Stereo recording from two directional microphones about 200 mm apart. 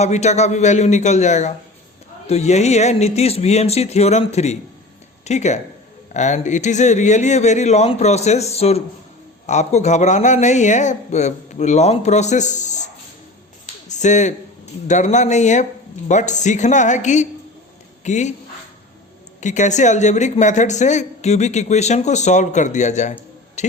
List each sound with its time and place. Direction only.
0.0 s speech: 35° left (ahead or behind)
19.4 s speech: 35° left (ahead or behind)
23.6 s a sound: 35° left (ahead or behind)